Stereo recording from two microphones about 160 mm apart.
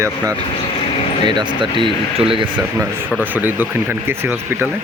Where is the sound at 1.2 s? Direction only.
30° right (ahead or behind).